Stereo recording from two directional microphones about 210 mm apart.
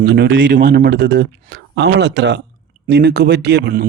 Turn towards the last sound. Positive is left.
turn(degrees=-50)  # may be behind; listen again after turning